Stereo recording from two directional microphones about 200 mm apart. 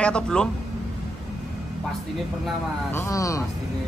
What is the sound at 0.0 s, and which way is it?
Speech, 5° left (ahead or behind).